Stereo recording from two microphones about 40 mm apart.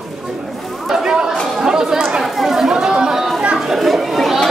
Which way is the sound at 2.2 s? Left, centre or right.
Centre.